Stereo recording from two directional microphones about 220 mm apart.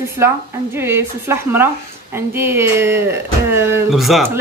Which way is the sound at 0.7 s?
10° right (ahead or behind).